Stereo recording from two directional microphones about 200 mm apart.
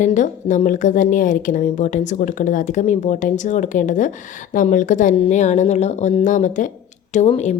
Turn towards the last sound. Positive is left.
turn(degrees=35)  # may be behind; listen again after turning